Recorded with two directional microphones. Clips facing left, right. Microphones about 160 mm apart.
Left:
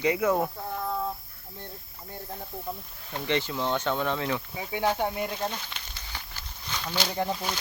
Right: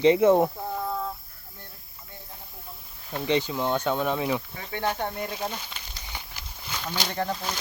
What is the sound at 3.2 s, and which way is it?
Speech, 15° right (ahead or behind).